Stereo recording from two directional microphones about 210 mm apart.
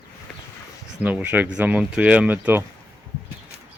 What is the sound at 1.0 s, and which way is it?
Speech, 5° right (ahead or behind).